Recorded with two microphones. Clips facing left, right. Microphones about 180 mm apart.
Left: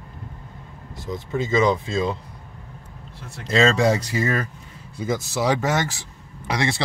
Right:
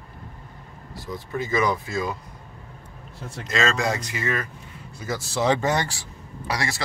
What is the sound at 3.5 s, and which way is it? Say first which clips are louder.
Speech: left 6 dB; 30° left (ahead or behind).